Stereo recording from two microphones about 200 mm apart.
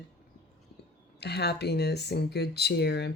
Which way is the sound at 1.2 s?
55° left (ahead or behind).